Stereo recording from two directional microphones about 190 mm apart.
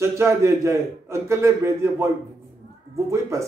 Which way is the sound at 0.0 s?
15° right (ahead or behind).